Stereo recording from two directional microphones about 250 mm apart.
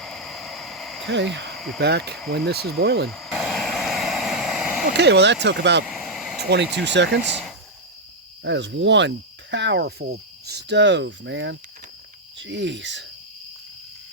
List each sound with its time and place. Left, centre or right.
0.0 s a sound: centre
1.0 s speech: right
1.5 s cricket: centre
1.8 s speech: right
3.1 s vehicle: centre
4.9 s speech: right
5.8 s a sound: centre
6.4 s speech: right
7.2 s speech: centre
8.4 s speech: right